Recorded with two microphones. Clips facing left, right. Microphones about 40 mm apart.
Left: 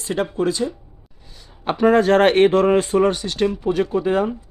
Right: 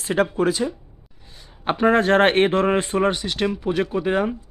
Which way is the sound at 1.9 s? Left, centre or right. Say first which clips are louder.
Left 2 dB; right.